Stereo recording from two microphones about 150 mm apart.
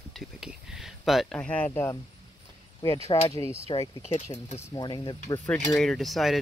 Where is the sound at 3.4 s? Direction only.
40° right (ahead or behind).